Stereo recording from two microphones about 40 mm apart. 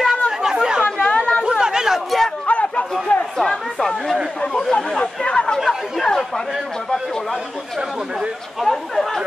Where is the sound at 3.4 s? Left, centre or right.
Centre.